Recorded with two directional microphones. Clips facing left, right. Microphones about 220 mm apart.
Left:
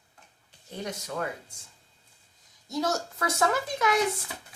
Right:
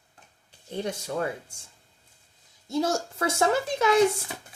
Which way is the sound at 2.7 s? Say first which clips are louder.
Right 3 dB; 30° right (ahead or behind).